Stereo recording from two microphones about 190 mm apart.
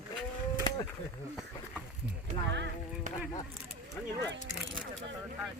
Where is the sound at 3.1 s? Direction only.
40° right (ahead or behind).